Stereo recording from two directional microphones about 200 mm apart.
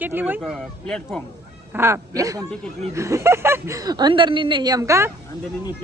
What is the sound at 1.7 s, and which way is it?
Speech, 15° right (ahead or behind).